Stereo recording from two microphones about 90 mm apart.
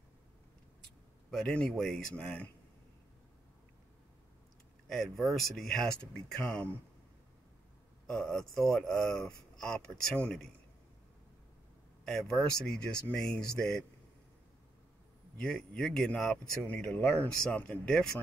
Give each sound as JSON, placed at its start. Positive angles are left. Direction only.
{"t": 1.3, "sound": "speech", "side_deg": 10}
{"t": 4.8, "sound": "speech", "side_deg": 5}
{"t": 8.1, "sound": "speech", "side_deg": 10}
{"t": 12.0, "sound": "speech", "side_deg": 5}
{"t": 15.3, "sound": "speech", "side_deg": 10}